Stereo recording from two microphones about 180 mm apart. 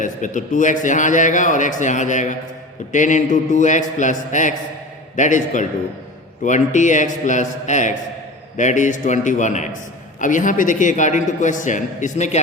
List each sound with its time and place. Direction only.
0.0 s a man's voice: 45° left (ahead or behind)